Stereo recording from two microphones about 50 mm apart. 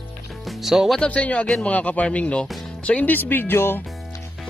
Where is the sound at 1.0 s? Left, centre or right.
Left.